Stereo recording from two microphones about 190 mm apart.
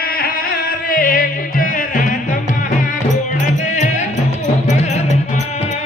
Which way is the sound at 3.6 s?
40° left (ahead or behind).